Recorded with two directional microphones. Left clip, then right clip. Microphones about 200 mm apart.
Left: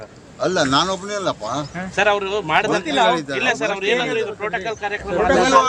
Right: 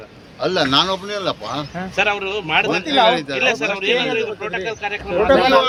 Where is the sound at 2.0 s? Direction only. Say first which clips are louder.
Left 1 dB; 40° left (ahead or behind).